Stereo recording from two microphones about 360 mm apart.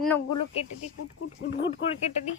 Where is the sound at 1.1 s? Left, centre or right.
Left.